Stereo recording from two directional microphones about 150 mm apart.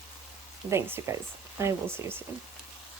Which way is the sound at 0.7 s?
20° right (ahead or behind).